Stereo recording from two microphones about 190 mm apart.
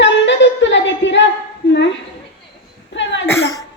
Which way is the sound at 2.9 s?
70° left (ahead or behind).